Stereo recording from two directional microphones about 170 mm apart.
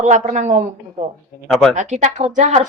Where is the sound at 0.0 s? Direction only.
45° right (ahead or behind).